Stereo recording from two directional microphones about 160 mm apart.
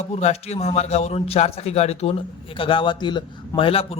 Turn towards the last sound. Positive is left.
turn(degrees=35)  # may be behind; listen again after turning